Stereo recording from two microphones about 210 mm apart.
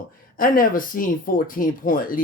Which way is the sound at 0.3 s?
40° left (ahead or behind).